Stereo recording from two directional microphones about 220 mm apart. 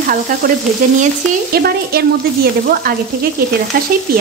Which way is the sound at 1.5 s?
45° right (ahead or behind).